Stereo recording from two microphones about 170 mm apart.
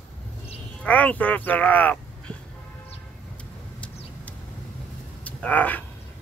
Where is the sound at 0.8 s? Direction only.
10° left (ahead or behind).